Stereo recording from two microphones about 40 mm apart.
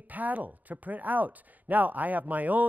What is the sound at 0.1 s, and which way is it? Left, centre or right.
Speech, right.